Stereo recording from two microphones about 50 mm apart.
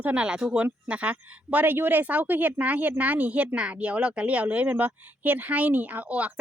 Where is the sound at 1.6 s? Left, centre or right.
Right.